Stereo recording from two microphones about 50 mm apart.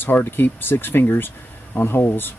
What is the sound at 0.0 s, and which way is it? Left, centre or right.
Speech, left.